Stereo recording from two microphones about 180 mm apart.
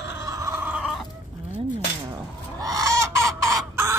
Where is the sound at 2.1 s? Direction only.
20° right (ahead or behind).